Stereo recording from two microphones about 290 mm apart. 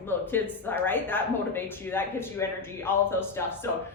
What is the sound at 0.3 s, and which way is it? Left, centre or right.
A woman's voice, centre.